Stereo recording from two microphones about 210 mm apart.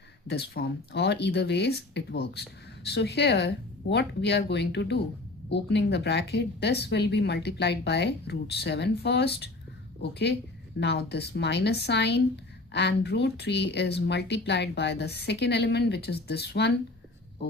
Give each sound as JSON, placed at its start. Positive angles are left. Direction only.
{"t": 0.3, "sound": "speech", "side_deg": 50}